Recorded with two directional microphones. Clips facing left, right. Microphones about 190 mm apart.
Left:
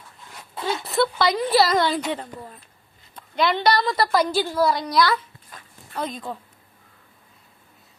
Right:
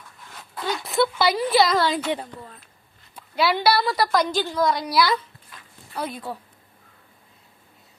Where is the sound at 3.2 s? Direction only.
5° right (ahead or behind).